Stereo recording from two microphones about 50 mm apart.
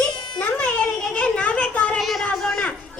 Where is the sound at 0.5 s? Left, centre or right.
Centre.